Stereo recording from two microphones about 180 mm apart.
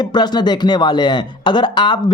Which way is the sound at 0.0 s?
25° left (ahead or behind).